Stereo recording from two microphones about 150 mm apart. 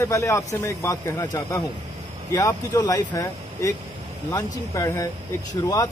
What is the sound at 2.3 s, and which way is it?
Speech, 25° left (ahead or behind).